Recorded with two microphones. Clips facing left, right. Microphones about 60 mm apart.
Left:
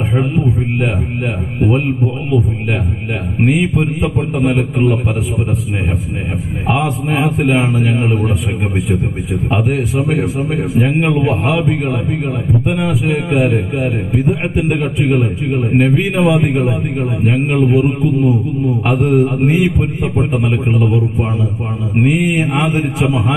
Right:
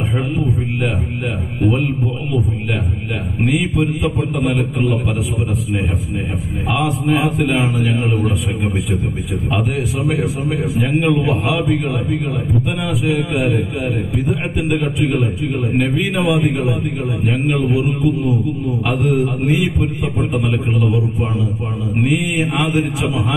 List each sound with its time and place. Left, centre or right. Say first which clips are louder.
3.4 s a man's voice: left 3 dB; left
7.1 s a man's voice: left 2 dB; left
10.7 s a man's voice: left 2 dB; left
12.6 s a man's voice: left 3 dB; left
14.1 s a man's voice: left 4 dB; left
15.7 s a man's voice: left 6 dB; left
16.2 s a man's voice: left 2 dB; left
22.1 s a man's voice: left 3 dB; left
22.8 s a man's voice: left 2 dB; left